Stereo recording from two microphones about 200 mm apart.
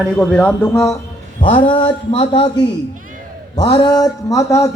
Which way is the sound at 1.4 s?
25° left (ahead or behind).